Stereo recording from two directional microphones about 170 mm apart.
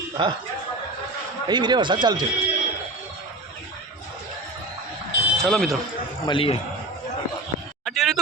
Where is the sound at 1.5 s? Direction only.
25° right (ahead or behind).